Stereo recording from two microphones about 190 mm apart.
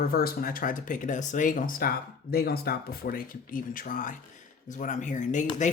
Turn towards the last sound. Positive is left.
turn(degrees=40)  # may be behind; listen again after turning